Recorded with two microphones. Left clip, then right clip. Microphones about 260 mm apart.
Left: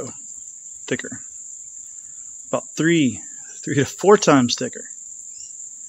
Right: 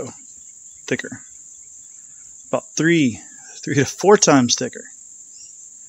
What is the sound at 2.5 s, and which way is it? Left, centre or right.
Speech, centre.